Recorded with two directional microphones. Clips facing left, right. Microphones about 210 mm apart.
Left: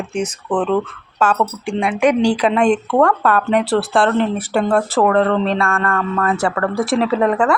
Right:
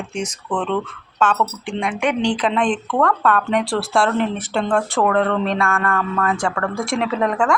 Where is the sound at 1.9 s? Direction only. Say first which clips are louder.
Left 7 dB; 40° left (ahead or behind).